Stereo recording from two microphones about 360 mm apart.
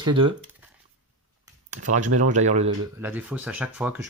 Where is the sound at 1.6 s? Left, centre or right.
Right.